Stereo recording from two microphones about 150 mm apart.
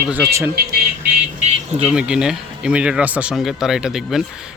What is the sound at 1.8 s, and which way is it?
Speech, 5° right (ahead or behind).